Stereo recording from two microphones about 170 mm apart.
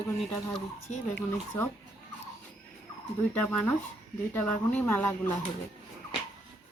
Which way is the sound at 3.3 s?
5° left (ahead or behind).